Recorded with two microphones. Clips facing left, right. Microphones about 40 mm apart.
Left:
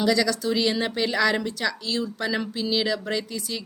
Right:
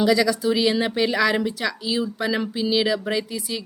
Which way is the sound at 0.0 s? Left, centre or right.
Centre.